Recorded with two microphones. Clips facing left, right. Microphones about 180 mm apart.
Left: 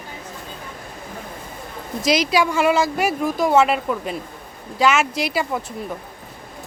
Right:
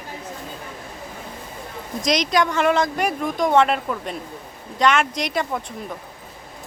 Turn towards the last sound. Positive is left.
turn(degrees=5)  # may be behind; listen again after turning